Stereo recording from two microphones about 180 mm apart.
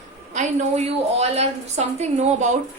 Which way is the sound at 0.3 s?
40° right (ahead or behind).